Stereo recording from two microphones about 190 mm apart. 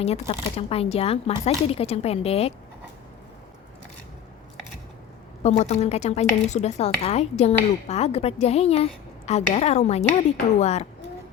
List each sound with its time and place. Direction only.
0.0 s speech: 35° left (ahead or behind)
5.4 s speech: 35° left (ahead or behind)